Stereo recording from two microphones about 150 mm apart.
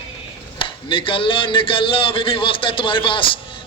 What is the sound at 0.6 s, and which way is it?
Speech, 35° left (ahead or behind).